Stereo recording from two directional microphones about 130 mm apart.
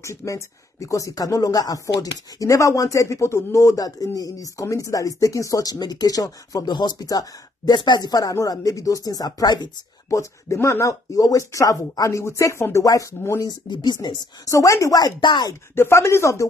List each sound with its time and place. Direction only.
0.0 s speech: 25° left (ahead or behind)
13.7 s speech: 35° left (ahead or behind)
15.7 s speech: 20° left (ahead or behind)